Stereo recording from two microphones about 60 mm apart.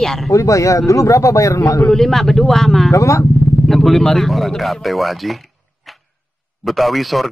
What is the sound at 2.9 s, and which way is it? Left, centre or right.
Speech, left.